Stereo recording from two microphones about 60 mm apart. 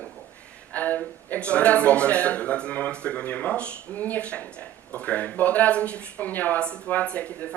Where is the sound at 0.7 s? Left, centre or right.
Left.